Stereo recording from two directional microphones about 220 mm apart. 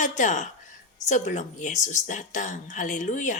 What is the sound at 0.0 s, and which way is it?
A woman's voice, 35° left (ahead or behind).